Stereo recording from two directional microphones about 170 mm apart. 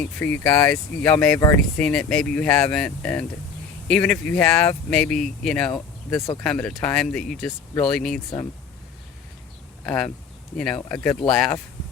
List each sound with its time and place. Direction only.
0.2 s speech: 10° left (ahead or behind)
9.8 s speech: 5° left (ahead or behind)